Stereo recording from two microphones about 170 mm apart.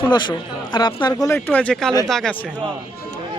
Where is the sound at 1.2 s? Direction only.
10° left (ahead or behind).